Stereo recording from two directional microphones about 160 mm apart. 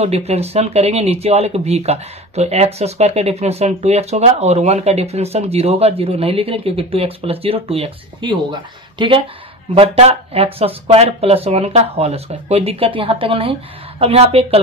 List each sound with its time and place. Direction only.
0.0 s speech: 40° right (ahead or behind)